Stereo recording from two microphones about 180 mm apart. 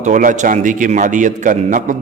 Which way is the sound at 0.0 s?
45° right (ahead or behind).